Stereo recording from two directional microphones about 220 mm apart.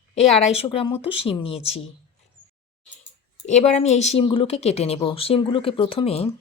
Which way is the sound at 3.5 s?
30° left (ahead or behind).